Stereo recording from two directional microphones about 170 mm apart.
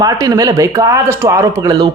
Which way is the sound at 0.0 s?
20° right (ahead or behind).